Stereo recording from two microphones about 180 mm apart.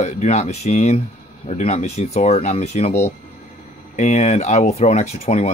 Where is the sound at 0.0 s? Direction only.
40° left (ahead or behind).